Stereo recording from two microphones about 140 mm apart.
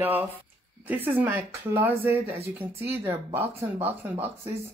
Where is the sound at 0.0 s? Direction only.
15° right (ahead or behind).